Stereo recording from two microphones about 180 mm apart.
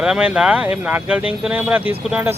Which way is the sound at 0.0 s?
5° right (ahead or behind).